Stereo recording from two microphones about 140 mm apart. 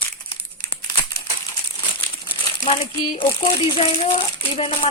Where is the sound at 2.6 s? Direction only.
40° left (ahead or behind).